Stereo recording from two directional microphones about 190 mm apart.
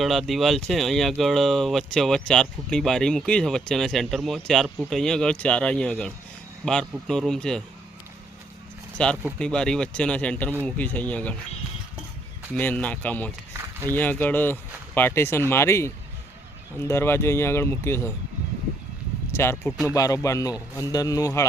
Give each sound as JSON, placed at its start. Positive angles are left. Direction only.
{"t": 0.0, "sound": "speech", "side_deg": 0}
{"t": 9.0, "sound": "speech", "side_deg": 5}
{"t": 12.5, "sound": "speech", "side_deg": 5}
{"t": 19.3, "sound": "speech", "side_deg": 15}
{"t": 19.6, "sound": "speech", "side_deg": -5}
{"t": 19.9, "sound": "speech", "side_deg": 15}